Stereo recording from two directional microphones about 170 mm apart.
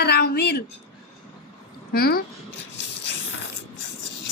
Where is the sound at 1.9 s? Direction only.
65° left (ahead or behind).